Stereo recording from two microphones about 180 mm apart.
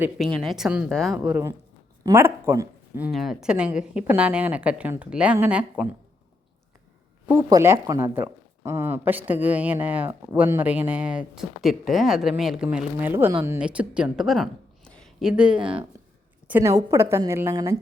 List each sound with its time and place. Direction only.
0.3 s a woman's voice: centre (ahead or behind)
3.1 s speech: centre (ahead or behind)
7.3 s speech: 15° right (ahead or behind)